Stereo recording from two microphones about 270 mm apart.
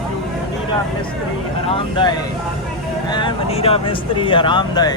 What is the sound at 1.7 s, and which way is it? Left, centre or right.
Speech, centre.